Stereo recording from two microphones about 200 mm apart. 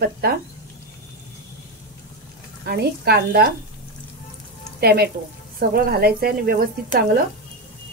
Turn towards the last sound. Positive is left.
turn(degrees=-45)  # may be behind; listen again after turning